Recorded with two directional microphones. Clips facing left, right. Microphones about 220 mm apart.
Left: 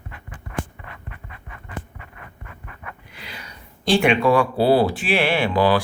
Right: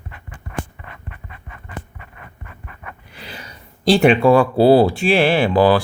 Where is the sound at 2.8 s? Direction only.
30° right (ahead or behind).